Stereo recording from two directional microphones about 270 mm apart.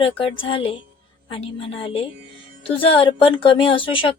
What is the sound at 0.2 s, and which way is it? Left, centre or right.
Speech, centre.